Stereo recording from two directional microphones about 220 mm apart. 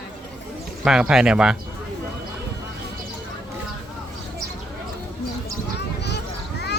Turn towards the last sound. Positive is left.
turn(degrees=50)  # may be behind; listen again after turning